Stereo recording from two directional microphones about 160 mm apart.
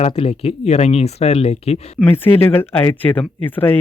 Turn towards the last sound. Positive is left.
turn(degrees=10)  # may be behind; listen again after turning